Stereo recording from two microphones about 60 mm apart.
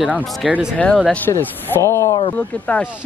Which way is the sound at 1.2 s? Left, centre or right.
Left.